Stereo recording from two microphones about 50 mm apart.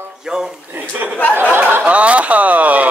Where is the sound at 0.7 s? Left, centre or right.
Right.